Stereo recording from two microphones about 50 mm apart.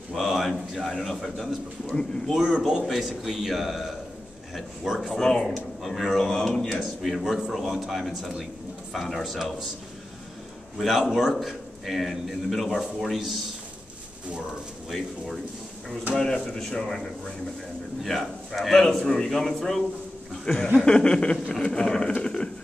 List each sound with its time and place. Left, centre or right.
0.1 s a sound: centre
0.8 s a man's voice: centre
2.3 s speech: centre
2.8 s a man's voice: centre
6.8 s a man's voice: centre
10.8 s a man's voice: centre
16.2 s a man's voice: centre
22.2 s a sound: centre